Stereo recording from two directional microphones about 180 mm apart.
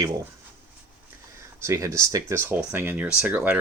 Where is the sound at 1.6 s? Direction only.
15° right (ahead or behind).